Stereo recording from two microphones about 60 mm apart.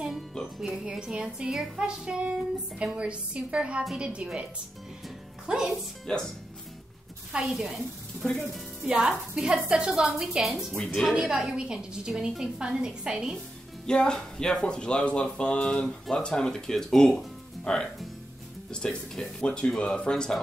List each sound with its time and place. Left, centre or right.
0.6 s a woman's voice: centre
5.5 s a woman's voice: centre
6.1 s speech: centre
7.3 s a woman's voice: centre
8.8 s a woman's voice: centre
13.8 s speech: centre